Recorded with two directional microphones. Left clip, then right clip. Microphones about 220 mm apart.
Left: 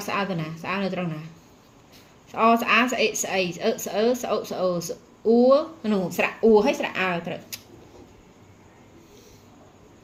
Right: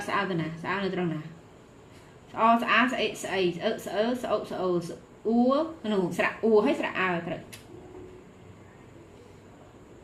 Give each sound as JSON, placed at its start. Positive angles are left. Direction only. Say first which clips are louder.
{"t": 0.1, "sound": "a woman's voice", "louder": "left 2 dB", "side_deg": 40}
{"t": 2.3, "sound": "a woman's voice", "louder": "left 3 dB", "side_deg": 40}